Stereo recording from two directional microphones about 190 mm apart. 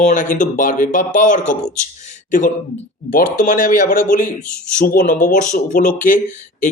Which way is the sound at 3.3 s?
45° left (ahead or behind).